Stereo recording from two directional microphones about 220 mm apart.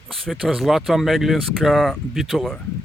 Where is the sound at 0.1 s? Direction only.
Centre (ahead or behind).